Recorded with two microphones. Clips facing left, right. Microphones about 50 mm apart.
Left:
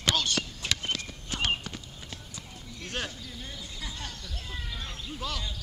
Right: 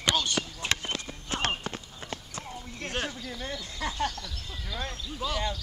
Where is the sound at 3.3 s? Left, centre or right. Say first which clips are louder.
Right 5 dB; right.